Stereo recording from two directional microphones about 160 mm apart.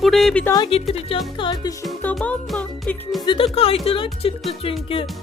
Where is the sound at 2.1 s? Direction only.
5° left (ahead or behind).